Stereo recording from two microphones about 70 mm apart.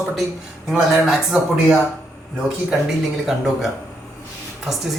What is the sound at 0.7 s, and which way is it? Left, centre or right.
Speech, centre.